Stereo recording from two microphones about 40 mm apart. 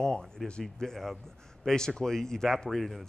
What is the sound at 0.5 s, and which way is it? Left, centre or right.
Speech, left.